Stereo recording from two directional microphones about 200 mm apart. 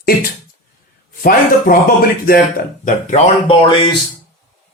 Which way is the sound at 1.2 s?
45° left (ahead or behind).